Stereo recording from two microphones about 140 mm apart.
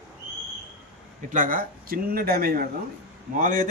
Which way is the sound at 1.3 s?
75° right (ahead or behind).